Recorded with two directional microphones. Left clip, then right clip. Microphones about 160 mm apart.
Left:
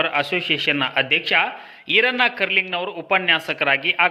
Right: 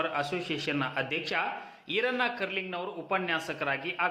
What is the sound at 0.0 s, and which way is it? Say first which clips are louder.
A man's voice: left 10 dB; 25° left (ahead or behind).